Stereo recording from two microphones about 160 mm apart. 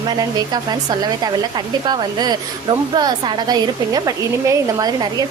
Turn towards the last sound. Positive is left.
turn(degrees=-25)  # may be behind; listen again after turning